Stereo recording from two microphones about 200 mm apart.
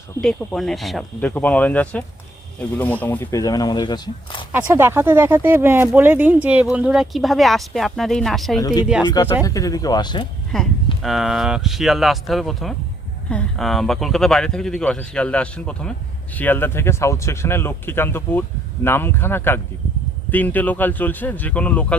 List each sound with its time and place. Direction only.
0.2 s speech: 5° left (ahead or behind); by 4.4 s 20° left (ahead or behind)
4.5 s speech: 15° right (ahead or behind)
9.0 s speech: 20° left (ahead or behind)
10.5 s speech: 5° left (ahead or behind)